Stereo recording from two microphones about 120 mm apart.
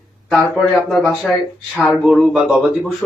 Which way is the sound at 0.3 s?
Centre (ahead or behind).